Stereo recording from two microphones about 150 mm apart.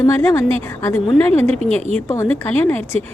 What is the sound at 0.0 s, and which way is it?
Speech, 15° left (ahead or behind).